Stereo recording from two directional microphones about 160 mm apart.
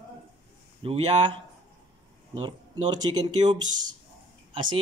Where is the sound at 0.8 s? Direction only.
35° right (ahead or behind).